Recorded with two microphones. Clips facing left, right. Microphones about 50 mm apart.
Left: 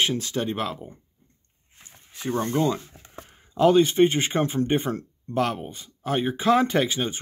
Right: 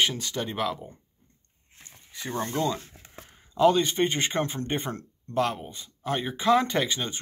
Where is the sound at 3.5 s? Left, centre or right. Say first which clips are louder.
Left 3 dB; centre.